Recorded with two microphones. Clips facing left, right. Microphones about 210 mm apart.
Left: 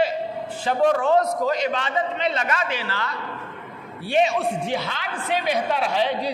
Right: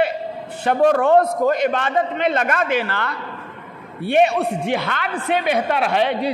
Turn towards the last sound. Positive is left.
turn(degrees=-60)  # may be behind; listen again after turning